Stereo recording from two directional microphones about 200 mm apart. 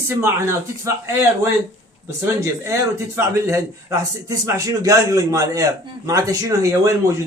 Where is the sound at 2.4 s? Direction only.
15° right (ahead or behind).